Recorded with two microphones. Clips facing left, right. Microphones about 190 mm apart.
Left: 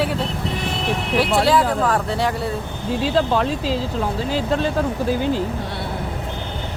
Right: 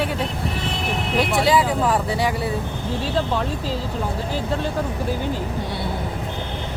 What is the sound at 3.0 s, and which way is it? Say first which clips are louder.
Speech: left 5 dB; 90° left.